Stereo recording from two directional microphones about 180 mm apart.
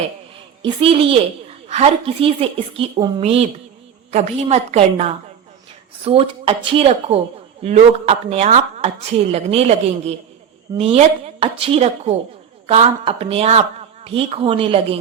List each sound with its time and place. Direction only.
0.6 s a woman's voice: 30° right (ahead or behind)